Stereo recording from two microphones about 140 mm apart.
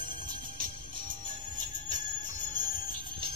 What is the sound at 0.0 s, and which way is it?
Music, 30° right (ahead or behind).